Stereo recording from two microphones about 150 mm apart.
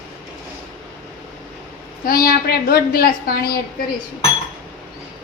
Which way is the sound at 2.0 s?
75° left (ahead or behind).